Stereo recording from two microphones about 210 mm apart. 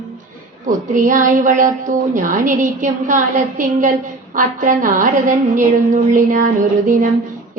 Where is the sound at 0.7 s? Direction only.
40° right (ahead or behind).